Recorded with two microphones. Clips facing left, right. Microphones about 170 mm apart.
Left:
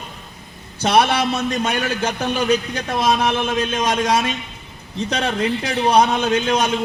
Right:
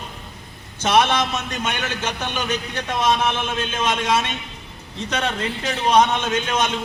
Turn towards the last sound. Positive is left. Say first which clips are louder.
# left 4 dB
turn(degrees=35)  # may be behind; listen again after turning